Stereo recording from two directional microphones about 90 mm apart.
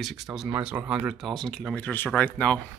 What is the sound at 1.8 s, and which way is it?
Speech, 20° left (ahead or behind).